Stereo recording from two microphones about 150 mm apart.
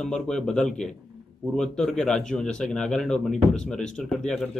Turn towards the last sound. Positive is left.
turn(degrees=5)  # may be behind; listen again after turning